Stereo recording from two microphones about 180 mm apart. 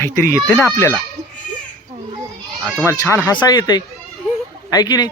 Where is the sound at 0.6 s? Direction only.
15° left (ahead or behind).